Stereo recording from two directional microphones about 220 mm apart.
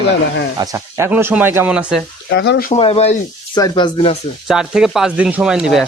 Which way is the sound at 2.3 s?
55° left (ahead or behind).